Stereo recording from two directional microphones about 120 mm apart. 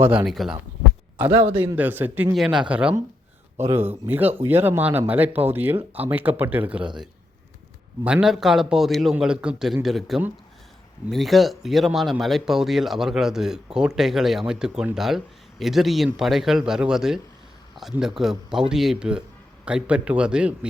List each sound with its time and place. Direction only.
0.3 s speech: centre (ahead or behind)
1.1 s speech: 15° right (ahead or behind)
2.3 s speech: centre (ahead or behind)
6.8 s a man's voice: 40° right (ahead or behind)
8.0 s speech: 5° right (ahead or behind)